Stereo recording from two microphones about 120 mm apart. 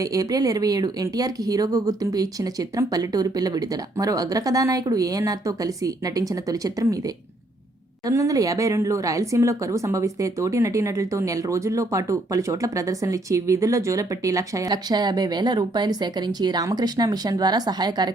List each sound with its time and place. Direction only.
0.0 s speech: 30° right (ahead or behind)
8.0 s a woman's voice: 25° right (ahead or behind)